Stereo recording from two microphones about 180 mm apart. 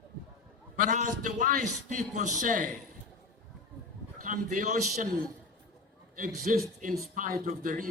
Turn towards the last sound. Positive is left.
turn(degrees=-50)  # may be behind; listen again after turning